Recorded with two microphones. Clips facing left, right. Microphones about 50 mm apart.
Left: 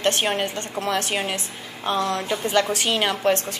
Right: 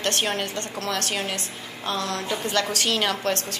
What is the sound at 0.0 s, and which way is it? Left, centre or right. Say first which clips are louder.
A woman's voice: left 3 dB; centre.